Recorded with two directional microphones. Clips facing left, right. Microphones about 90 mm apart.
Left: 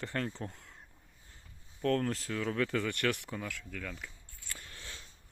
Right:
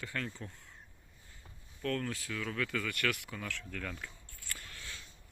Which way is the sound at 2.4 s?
30° left (ahead or behind).